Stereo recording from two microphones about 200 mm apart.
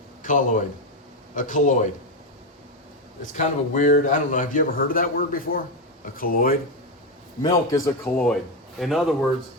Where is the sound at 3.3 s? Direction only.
40° left (ahead or behind).